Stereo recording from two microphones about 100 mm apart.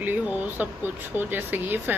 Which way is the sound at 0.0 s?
15° right (ahead or behind).